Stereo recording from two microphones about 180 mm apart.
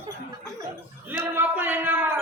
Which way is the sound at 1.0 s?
10° right (ahead or behind).